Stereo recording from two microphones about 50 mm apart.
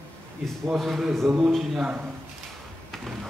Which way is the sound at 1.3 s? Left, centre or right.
Right.